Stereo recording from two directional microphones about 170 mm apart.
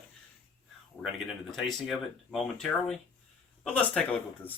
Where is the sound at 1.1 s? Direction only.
Centre (ahead or behind).